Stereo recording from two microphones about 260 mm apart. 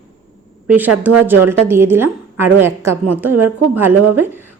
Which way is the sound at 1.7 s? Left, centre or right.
Centre.